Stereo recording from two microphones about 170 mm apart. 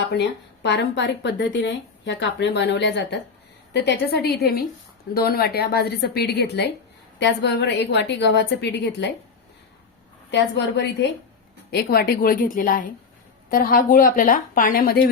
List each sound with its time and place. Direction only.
0.0 s speech: 90° left
3.7 s a woman's voice: 80° left
7.2 s speech: 85° left
11.7 s a woman's voice: 70° left (ahead or behind)